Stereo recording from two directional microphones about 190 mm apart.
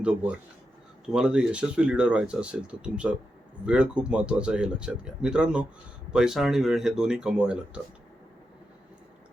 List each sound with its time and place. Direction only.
0.0 s speech: 5° right (ahead or behind)